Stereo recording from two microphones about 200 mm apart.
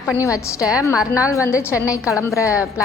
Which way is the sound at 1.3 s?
15° left (ahead or behind).